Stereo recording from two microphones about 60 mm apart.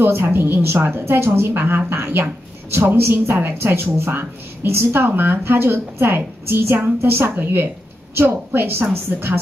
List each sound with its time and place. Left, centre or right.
0.0 s a woman's voice: right